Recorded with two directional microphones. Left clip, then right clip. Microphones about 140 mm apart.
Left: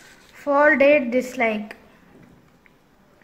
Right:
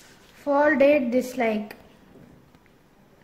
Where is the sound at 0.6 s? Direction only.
20° right (ahead or behind).